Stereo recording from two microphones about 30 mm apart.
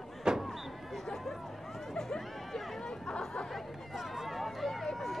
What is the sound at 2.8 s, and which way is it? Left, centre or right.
Chatter, left.